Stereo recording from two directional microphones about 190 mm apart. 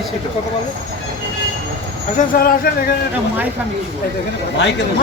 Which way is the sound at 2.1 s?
50° left (ahead or behind).